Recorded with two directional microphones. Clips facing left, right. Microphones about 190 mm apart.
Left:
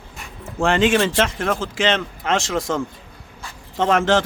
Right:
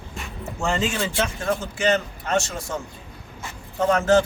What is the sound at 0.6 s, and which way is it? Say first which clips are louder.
Speech: left 8 dB; 90° left.